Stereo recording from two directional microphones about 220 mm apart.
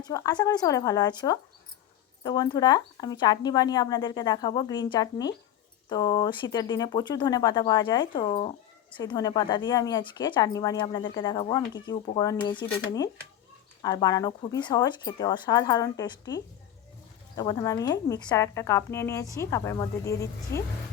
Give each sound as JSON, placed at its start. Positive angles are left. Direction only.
{"t": 0.0, "sound": "a woman's voice", "side_deg": 15}